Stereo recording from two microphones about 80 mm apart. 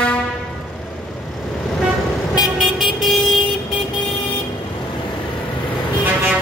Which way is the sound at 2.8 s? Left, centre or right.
Centre.